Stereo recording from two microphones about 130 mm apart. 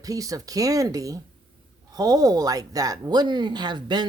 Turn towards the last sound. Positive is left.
turn(degrees=-35)  # may be behind; listen again after turning